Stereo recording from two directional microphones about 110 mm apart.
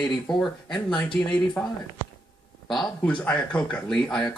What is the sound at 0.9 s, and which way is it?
Speech, 10° left (ahead or behind).